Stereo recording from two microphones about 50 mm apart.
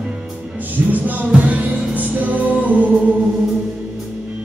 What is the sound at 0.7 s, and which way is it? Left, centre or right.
Music, right.